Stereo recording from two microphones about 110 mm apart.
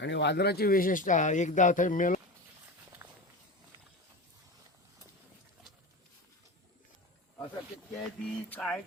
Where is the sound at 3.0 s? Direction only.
20° right (ahead or behind).